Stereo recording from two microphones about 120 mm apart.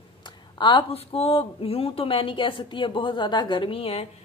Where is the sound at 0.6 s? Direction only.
40° left (ahead or behind).